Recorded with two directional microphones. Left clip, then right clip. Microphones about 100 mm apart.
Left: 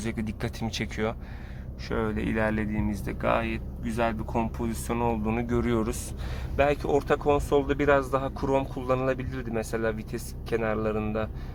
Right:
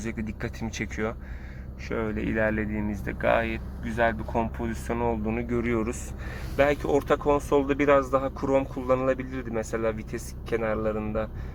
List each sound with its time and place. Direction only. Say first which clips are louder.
0.0 s speech: left 1 dB; 30° left (ahead or behind); by 4.6 s 5° left (ahead or behind)
4.9 s speech: even; 15° left (ahead or behind)
10.6 s speech: even; 35° left (ahead or behind)